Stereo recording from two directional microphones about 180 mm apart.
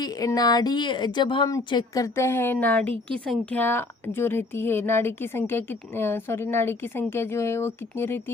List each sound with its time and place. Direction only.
0.0 s a woman's voice: 20° left (ahead or behind)